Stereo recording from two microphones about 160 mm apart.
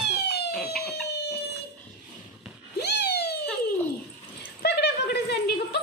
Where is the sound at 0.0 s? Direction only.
90° left.